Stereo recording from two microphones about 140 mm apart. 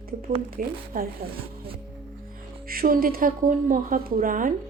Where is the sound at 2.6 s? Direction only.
90° right.